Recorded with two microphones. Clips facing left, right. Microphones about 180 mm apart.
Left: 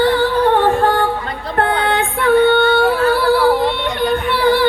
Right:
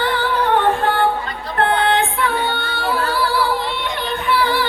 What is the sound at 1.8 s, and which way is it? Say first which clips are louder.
Music: left 2 dB; 55° left (ahead or behind).